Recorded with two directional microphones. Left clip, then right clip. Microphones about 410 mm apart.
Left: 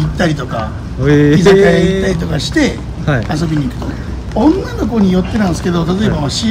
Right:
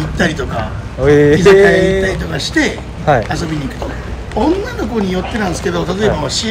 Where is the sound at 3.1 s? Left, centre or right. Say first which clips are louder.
Right 6 dB; centre.